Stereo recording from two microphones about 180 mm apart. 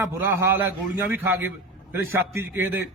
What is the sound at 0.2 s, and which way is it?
A man's voice, 15° right (ahead or behind).